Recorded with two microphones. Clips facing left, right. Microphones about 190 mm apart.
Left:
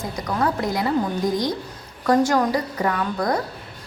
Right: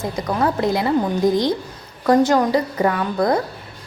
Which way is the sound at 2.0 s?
25° right (ahead or behind).